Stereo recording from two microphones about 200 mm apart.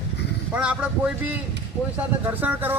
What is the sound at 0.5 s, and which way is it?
Speech, 5° right (ahead or behind).